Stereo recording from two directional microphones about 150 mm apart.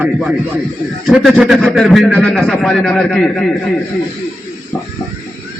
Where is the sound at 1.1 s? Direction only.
5° right (ahead or behind).